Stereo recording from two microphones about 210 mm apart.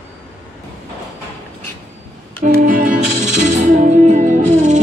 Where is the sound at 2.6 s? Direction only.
40° right (ahead or behind).